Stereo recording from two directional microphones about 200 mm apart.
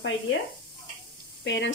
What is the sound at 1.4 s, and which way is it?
Speech, 60° left (ahead or behind).